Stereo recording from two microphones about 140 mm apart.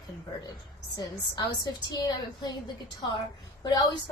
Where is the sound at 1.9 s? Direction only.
30° left (ahead or behind).